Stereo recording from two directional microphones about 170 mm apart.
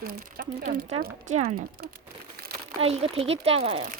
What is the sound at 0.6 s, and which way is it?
Speech, 45° right (ahead or behind).